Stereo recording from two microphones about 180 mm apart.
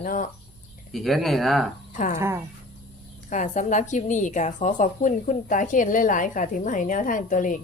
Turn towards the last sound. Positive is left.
turn(degrees=45)  # may be behind; listen again after turning